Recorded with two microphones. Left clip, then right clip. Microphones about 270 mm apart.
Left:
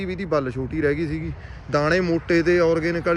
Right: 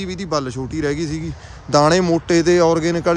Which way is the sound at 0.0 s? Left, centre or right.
Centre.